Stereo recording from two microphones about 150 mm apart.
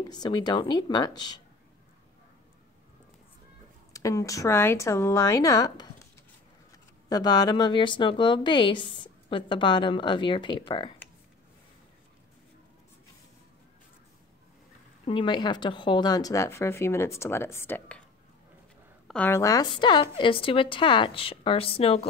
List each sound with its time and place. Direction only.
0.0 s a woman's voice: 30° left (ahead or behind)
3.9 s a woman's voice: 20° left (ahead or behind)
15.0 s a woman's voice: 30° left (ahead or behind); by 18.0 s 10° left (ahead or behind)
19.0 s speech: 10° left (ahead or behind); by 22.0 s 40° left (ahead or behind)